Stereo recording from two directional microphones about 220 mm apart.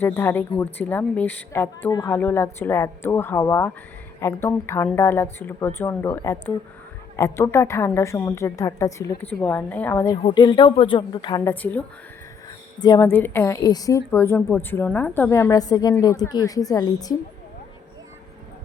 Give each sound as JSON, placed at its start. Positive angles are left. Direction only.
{"t": 0.0, "sound": "a woman's voice", "side_deg": 10}